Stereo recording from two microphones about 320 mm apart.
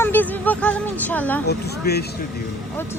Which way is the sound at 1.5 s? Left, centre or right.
Left.